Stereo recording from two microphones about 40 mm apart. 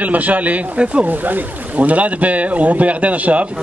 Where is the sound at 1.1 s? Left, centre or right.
Right.